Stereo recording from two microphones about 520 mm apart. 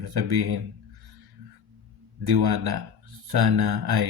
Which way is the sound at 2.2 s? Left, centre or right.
Right.